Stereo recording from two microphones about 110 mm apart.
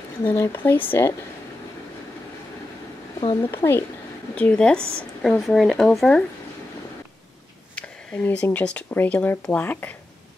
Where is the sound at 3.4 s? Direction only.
20° left (ahead or behind); by 6.2 s 5° left (ahead or behind).